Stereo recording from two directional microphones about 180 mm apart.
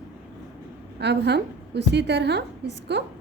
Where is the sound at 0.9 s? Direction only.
70° right (ahead or behind).